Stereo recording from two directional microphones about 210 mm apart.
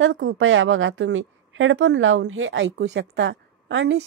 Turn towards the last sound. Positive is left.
turn(degrees=-60)  # may be behind; listen again after turning